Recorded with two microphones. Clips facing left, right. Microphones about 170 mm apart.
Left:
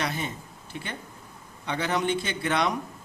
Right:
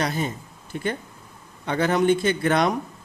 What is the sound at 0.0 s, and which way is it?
A man's voice, 40° right (ahead or behind).